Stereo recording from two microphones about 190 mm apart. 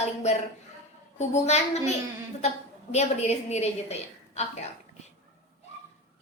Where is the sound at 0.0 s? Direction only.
35° left (ahead or behind).